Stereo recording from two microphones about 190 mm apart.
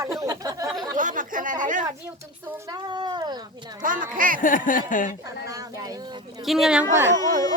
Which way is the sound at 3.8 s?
45° right (ahead or behind).